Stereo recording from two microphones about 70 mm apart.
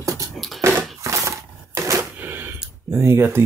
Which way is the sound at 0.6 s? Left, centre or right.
Right.